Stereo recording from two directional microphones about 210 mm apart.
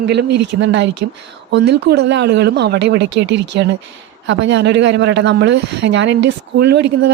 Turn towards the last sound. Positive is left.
turn(degrees=-55)  # may be behind; listen again after turning